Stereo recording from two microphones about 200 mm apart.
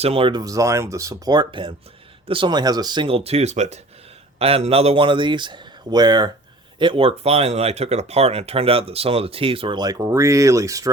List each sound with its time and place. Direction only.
0.0 s speech: 25° right (ahead or behind)